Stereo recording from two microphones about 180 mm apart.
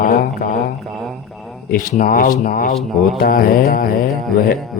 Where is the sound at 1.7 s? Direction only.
50° left (ahead or behind).